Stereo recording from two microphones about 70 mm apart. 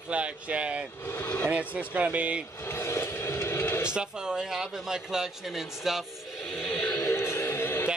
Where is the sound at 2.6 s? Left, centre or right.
Left.